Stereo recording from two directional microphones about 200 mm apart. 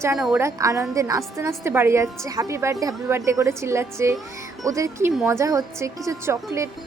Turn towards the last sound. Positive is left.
turn(degrees=-15)  # may be behind; listen again after turning